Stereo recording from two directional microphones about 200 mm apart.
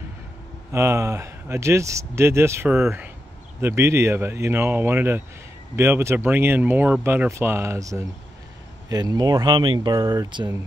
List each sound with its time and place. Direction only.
0.7 s speech: 15° right (ahead or behind)